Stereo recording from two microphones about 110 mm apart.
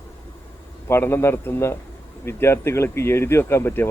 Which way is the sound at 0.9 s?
20° left (ahead or behind).